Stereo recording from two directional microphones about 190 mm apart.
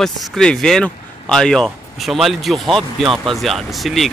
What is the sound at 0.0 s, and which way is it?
Speech, centre (ahead or behind).